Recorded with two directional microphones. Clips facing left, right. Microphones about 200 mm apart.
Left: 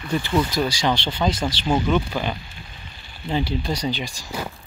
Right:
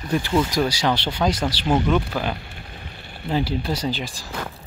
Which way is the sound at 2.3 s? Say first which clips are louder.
Right 2 dB; 65° right (ahead or behind).